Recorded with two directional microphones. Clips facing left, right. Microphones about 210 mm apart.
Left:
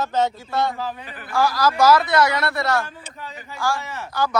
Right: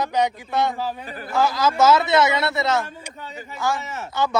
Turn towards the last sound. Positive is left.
turn(degrees=-20)  # may be behind; listen again after turning